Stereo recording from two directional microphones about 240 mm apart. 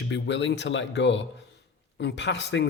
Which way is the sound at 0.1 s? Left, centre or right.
Left.